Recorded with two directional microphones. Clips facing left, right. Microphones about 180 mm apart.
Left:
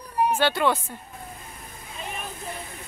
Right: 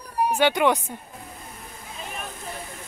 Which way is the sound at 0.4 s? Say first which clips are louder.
Right 3 dB; 15° right (ahead or behind).